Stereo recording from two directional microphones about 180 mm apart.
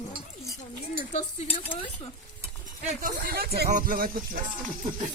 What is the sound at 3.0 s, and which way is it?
Speech, 50° right (ahead or behind).